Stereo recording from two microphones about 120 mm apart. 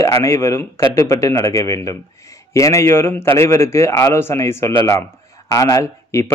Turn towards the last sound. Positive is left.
turn(degrees=25)  # may be behind; listen again after turning